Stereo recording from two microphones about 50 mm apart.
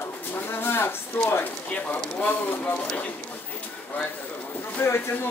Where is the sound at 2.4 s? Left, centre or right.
Left.